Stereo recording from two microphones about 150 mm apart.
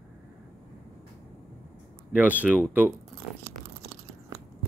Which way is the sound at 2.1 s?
10° right (ahead or behind).